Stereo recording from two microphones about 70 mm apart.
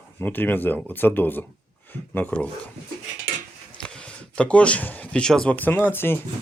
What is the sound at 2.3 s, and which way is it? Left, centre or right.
Speech, centre.